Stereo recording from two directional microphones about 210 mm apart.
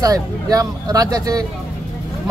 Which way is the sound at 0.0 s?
15° right (ahead or behind).